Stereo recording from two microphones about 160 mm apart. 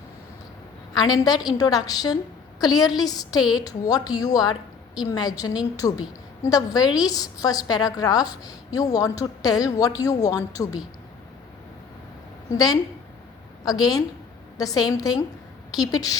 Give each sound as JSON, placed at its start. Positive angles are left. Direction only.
{"t": 0.9, "sound": "a woman's voice", "side_deg": 25}
{"t": 12.5, "sound": "a woman's voice", "side_deg": 25}